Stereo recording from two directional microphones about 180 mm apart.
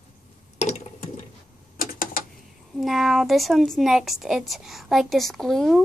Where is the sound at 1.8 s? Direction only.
50° left (ahead or behind).